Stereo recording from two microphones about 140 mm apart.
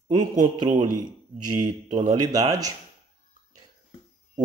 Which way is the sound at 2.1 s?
25° right (ahead or behind).